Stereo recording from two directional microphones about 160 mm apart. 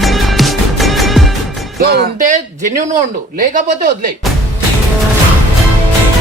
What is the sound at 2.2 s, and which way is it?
Speech, 50° right (ahead or behind).